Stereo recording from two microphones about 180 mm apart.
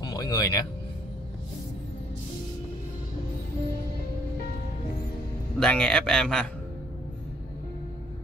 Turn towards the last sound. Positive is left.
turn(degrees=5)  # may be behind; listen again after turning